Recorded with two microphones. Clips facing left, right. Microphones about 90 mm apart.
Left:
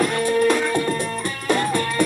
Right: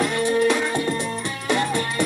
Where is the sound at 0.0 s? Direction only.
45° left (ahead or behind).